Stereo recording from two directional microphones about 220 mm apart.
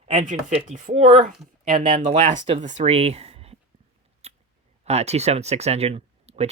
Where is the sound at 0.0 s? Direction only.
30° right (ahead or behind).